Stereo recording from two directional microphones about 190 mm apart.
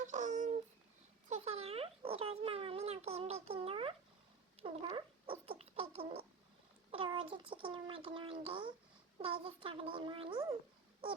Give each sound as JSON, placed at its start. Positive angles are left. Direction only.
{"t": 0.0, "sound": "a sound", "side_deg": -40}
{"t": 1.3, "sound": "speech", "side_deg": -35}
{"t": 4.6, "sound": "cat", "side_deg": -30}
{"t": 6.9, "sound": "a child's voice", "side_deg": -25}